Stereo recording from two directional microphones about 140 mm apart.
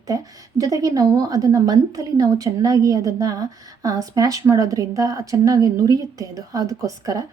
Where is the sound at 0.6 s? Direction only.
25° right (ahead or behind).